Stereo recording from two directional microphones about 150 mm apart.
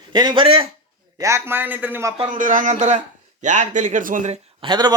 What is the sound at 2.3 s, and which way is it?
Speech, 60° right (ahead or behind).